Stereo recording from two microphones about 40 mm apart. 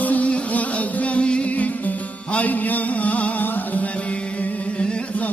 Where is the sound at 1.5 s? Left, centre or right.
Left.